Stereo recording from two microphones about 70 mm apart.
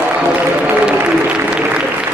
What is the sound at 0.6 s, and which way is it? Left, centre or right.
Applause, centre.